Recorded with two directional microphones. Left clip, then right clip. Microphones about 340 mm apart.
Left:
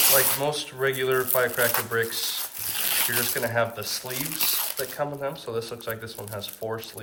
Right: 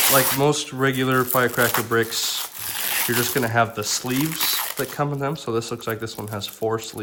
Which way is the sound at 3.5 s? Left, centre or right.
Centre.